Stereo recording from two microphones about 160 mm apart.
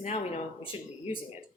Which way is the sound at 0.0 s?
45° left (ahead or behind).